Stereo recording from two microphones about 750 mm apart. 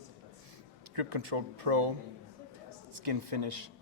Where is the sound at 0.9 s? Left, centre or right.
Right.